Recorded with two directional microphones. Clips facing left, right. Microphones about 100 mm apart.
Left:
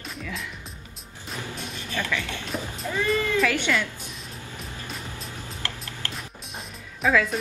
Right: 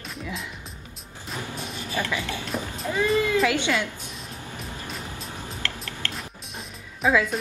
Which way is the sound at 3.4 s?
20° right (ahead or behind).